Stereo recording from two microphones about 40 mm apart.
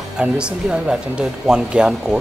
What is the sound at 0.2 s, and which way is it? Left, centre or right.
Speech, right.